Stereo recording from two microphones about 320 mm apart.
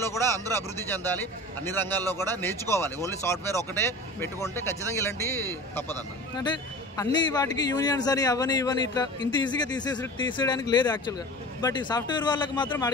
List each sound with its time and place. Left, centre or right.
0.0 s a man's voice: centre